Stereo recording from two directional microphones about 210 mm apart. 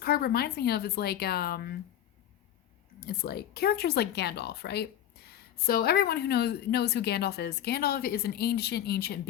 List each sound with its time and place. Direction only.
0.0 s a woman's voice: 45° left (ahead or behind)
3.0 s a woman's voice: 50° left (ahead or behind)